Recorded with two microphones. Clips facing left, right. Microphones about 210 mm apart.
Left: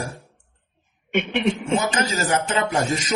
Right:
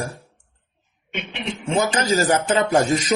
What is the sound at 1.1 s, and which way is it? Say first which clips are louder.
Speech: left 9 dB; 50° left (ahead or behind).